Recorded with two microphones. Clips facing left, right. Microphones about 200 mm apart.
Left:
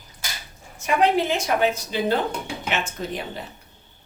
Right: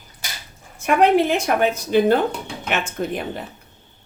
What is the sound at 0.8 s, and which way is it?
A woman's voice, 60° right (ahead or behind).